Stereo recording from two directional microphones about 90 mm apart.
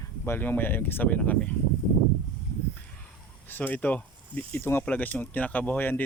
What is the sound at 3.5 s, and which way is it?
Speech, 20° left (ahead or behind).